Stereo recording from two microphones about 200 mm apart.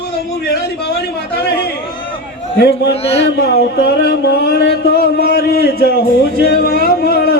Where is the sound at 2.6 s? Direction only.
55° left (ahead or behind).